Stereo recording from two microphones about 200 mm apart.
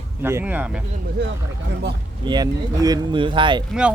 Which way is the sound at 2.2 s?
20° right (ahead or behind).